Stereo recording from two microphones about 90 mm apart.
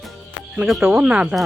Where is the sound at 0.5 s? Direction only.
5° right (ahead or behind).